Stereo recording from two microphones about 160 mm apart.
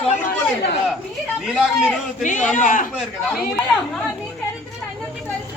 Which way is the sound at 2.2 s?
50° left (ahead or behind).